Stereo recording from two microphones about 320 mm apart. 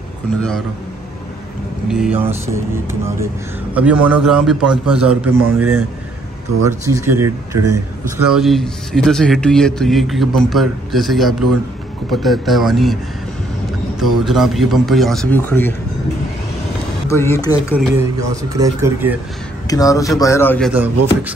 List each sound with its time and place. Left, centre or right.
0.4 s speech: centre
1.9 s speech: centre
17.1 s speech: centre
17.9 s speech: centre
19.7 s speech: centre